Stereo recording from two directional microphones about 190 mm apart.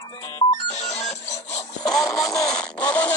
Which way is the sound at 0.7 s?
35° left (ahead or behind).